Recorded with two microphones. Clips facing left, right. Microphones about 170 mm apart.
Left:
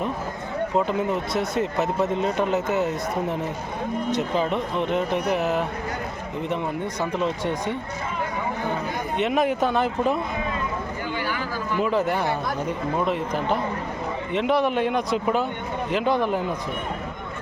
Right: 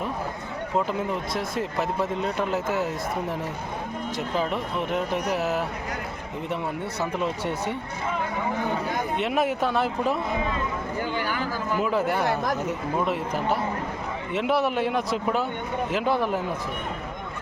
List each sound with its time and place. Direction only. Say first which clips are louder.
0.9 s speech: left 3 dB; centre (ahead or behind)
7.0 s speech: left 2 dB; 10° right (ahead or behind)
9.1 s speech: left 4 dB; centre (ahead or behind)
11.3 s a sound: even; 45° right (ahead or behind)
11.8 s speech: left 2 dB; 5° right (ahead or behind)